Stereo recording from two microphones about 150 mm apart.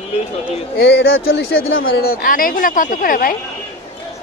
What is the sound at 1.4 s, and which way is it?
Speech, 85° left.